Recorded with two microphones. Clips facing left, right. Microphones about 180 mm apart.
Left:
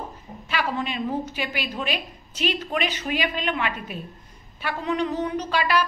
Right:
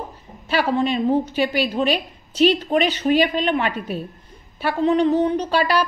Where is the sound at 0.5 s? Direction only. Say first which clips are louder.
Right 8 dB; 35° right (ahead or behind).